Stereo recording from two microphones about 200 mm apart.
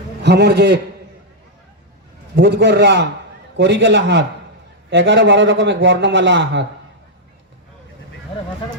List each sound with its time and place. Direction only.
0.2 s a man's voice: 55° right (ahead or behind)
2.3 s a man's voice: 60° right (ahead or behind)